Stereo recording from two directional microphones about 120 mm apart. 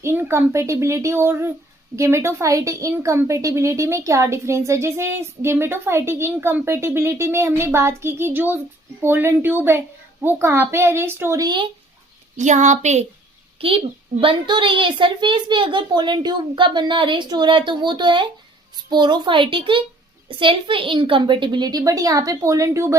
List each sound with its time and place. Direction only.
0.0 s a woman's voice: 20° right (ahead or behind)
11.4 s a child's voice: 45° right (ahead or behind)
12.4 s a woman's voice: 90° right
13.6 s a child's voice: 50° right (ahead or behind); by 23.0 s 25° right (ahead or behind)